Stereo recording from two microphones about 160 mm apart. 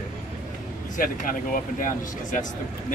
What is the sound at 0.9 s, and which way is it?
Speech, 60° left (ahead or behind).